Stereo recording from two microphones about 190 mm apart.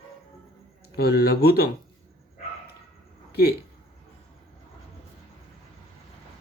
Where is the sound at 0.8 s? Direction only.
55° left (ahead or behind).